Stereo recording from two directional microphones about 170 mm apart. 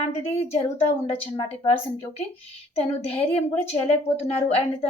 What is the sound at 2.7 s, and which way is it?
A woman's voice, 35° left (ahead or behind).